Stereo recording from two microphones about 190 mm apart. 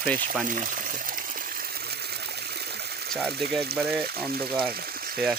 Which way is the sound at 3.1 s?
Centre (ahead or behind).